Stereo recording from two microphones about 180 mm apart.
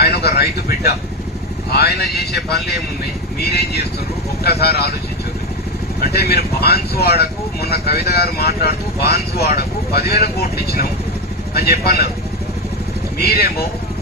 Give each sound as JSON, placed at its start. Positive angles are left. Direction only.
{"t": 0.0, "sound": "speech", "side_deg": 65}
{"t": 6.0, "sound": "speech", "side_deg": 60}
{"t": 13.2, "sound": "speech", "side_deg": 60}